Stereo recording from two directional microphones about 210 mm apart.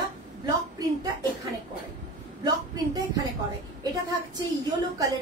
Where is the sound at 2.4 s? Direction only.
20° right (ahead or behind).